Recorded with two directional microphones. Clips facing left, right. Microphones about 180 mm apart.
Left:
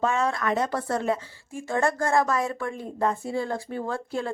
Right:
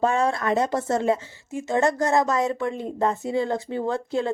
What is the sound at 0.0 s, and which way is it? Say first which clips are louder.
Speech: right 3 dB; 35° right (ahead or behind).